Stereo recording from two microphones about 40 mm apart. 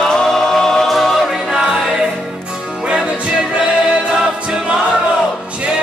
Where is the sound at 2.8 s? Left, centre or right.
Right.